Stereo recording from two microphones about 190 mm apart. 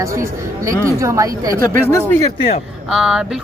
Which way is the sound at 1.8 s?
10° left (ahead or behind).